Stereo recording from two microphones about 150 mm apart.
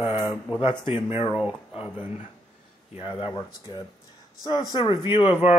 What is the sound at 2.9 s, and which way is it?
Speech, 35° left (ahead or behind).